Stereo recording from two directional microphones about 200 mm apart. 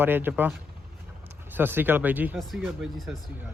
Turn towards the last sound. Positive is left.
turn(degrees=0)  # may be behind; listen again after turning